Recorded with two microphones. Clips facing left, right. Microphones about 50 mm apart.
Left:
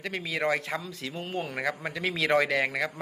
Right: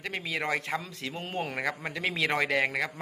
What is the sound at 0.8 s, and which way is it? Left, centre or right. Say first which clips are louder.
Speech: left 1 dB; right.